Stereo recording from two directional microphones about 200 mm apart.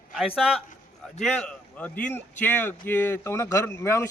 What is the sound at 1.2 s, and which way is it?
Speech, 5° left (ahead or behind).